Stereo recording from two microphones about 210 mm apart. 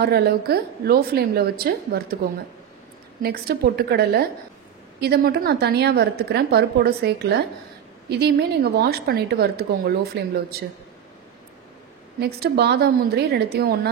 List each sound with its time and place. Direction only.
0.0 s a woman's voice: 50° right (ahead or behind)
3.2 s a woman's voice: 45° right (ahead or behind)
12.2 s a woman's voice: 50° right (ahead or behind)